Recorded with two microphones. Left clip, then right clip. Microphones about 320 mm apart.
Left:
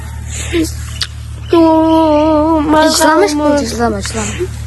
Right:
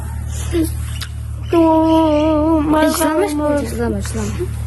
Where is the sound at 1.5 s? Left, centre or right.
Left.